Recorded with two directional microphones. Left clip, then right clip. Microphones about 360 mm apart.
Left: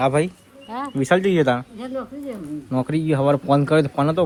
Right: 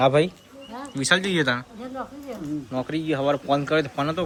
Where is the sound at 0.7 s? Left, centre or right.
Centre.